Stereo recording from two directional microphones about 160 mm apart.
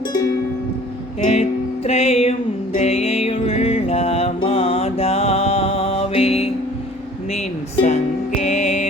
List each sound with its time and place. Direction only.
1.2 s music: 40° left (ahead or behind)
7.3 s speech: 45° left (ahead or behind)
8.4 s music: 45° left (ahead or behind)